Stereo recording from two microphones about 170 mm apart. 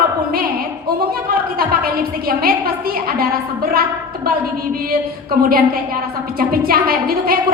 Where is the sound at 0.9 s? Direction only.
60° right (ahead or behind).